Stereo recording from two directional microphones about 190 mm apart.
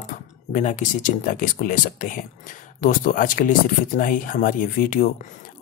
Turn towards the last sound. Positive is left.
turn(degrees=50)  # may be behind; listen again after turning